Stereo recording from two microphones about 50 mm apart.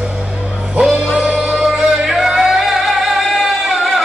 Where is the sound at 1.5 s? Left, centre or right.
Centre.